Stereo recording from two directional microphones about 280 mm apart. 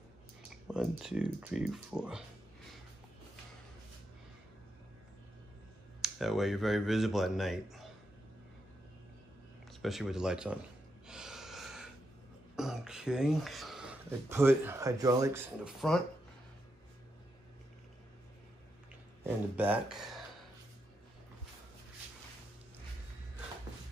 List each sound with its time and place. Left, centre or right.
0.7 s speech: centre
5.9 s speech: centre
9.7 s speech: centre
11.1 s snort: centre
12.5 s speech: centre
19.2 s speech: centre